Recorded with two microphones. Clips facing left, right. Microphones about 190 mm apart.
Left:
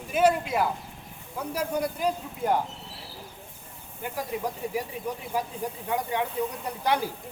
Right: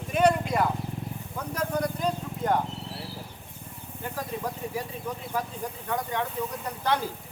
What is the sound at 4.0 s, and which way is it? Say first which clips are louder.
Speech: left 2 dB; 10° left (ahead or behind).